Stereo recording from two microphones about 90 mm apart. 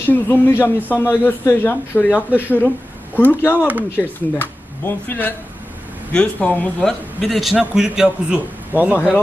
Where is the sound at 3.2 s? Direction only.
25° left (ahead or behind).